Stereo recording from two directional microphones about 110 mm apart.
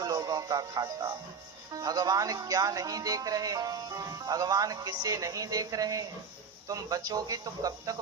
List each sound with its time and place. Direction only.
0.0 s speech: 35° right (ahead or behind)